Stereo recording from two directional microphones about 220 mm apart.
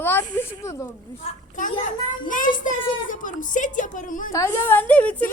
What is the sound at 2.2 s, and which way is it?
A woman's voice, 35° left (ahead or behind).